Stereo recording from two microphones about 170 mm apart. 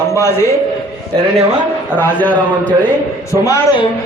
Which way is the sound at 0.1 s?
15° left (ahead or behind).